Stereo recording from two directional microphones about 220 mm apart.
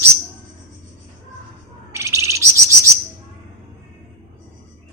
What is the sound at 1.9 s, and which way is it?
Chirp, 10° right (ahead or behind).